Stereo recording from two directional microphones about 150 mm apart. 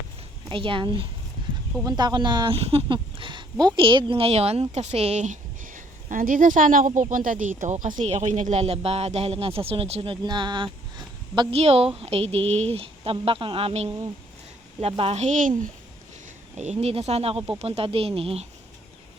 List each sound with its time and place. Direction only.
0.4 s a woman's voice: 35° right (ahead or behind)
2.6 s a sound: 40° right (ahead or behind)
3.8 s a woman's voice: 35° right (ahead or behind)
11.5 s a woman's voice: 40° right (ahead or behind)
16.6 s a woman's voice: 45° right (ahead or behind)